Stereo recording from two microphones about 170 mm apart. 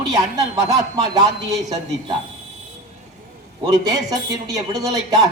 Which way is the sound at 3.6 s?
20° right (ahead or behind).